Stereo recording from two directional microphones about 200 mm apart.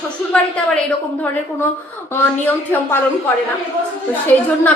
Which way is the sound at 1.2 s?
10° left (ahead or behind).